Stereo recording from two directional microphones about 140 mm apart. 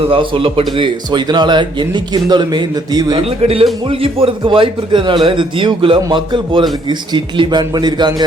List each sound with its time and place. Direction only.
0.1 s a man's voice: 40° right (ahead or behind)
3.2 s a man's voice: 45° right (ahead or behind)